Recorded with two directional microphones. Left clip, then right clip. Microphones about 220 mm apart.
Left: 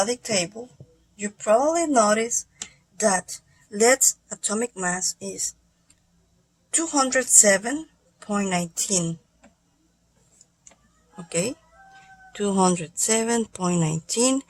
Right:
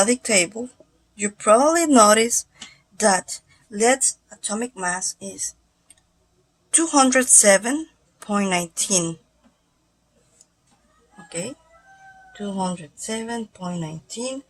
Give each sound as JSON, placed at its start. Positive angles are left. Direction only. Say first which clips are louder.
{"t": 0.1, "sound": "a woman's voice", "louder": "right 5 dB", "side_deg": -20}
{"t": 3.7, "sound": "speech", "louder": "even", "side_deg": 10}
{"t": 6.7, "sound": "a woman's voice", "louder": "right 5 dB", "side_deg": -5}
{"t": 11.3, "sound": "speech", "louder": "left 5 dB", "side_deg": 20}